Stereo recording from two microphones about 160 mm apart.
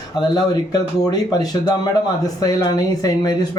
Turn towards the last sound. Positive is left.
turn(degrees=25)  # may be behind; listen again after turning